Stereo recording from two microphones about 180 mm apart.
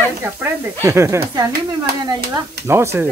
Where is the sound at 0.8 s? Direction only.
15° right (ahead or behind).